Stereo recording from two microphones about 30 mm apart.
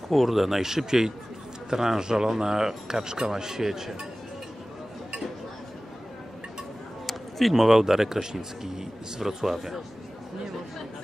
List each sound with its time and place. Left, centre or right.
0.1 s speech: centre
7.1 s a sound: centre
7.5 s speech: centre